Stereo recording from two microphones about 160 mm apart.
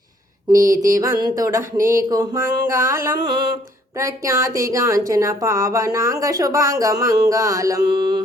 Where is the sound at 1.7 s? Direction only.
60° right (ahead or behind).